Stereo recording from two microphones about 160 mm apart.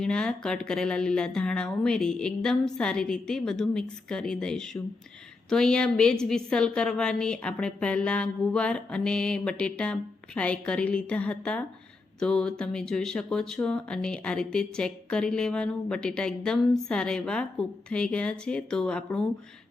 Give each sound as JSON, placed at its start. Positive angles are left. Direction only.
{"t": 0.0, "sound": "a woman's voice", "side_deg": 5}